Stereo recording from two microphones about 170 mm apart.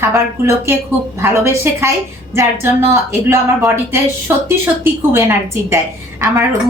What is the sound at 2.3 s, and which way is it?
A woman's voice, 15° right (ahead or behind).